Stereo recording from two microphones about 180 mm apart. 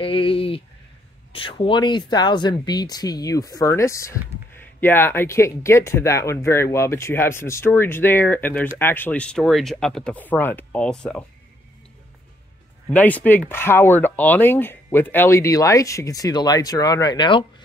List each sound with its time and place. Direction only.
0.0 s a sound: 30° left (ahead or behind)
1.3 s speech: 30° left (ahead or behind); by 11.2 s 5° left (ahead or behind)
12.9 s speech: 10° left (ahead or behind); by 17.5 s 25° left (ahead or behind)